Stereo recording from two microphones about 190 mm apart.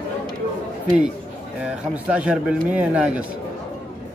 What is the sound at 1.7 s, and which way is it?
A man's voice, 5° right (ahead or behind).